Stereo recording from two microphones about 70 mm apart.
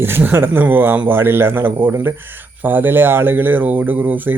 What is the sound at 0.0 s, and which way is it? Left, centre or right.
A man's voice, right.